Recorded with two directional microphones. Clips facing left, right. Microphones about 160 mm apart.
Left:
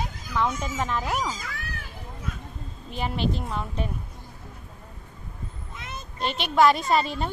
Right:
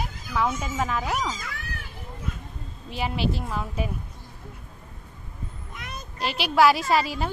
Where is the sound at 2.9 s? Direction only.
5° right (ahead or behind).